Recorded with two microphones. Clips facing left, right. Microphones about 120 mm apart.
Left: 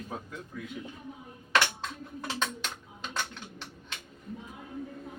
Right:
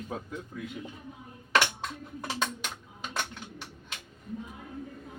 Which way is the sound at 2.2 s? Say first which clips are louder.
Right 1 dB; 15° right (ahead or behind).